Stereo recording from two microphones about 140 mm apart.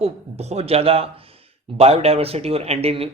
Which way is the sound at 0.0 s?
50° right (ahead or behind).